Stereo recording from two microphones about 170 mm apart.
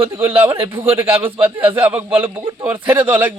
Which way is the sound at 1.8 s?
10° right (ahead or behind).